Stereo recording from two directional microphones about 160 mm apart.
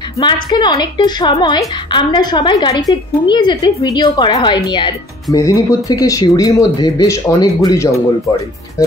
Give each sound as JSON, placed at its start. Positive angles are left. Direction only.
{"t": 0.2, "sound": "a woman's voice", "side_deg": 25}